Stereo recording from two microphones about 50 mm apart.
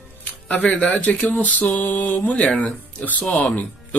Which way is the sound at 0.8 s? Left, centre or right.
Left.